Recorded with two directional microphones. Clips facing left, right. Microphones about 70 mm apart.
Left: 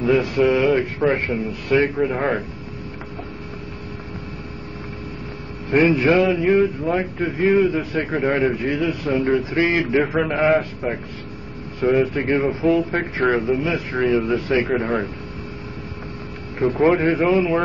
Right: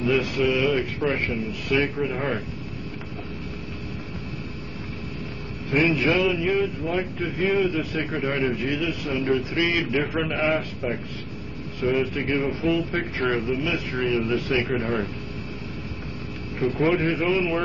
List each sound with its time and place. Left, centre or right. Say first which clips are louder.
0.0 s a man's voice: left 5 dB; left
5.7 s a man's voice: left 5 dB; left
16.5 s a man's voice: left 5 dB; left